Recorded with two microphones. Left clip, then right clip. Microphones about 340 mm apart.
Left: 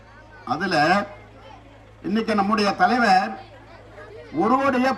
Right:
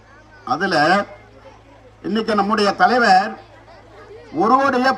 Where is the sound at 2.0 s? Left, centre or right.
Centre.